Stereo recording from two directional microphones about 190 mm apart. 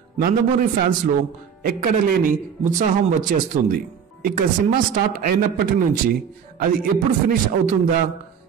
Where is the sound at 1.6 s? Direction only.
50° right (ahead or behind).